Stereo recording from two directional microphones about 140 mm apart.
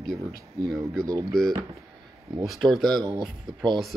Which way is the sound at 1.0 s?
25° right (ahead or behind).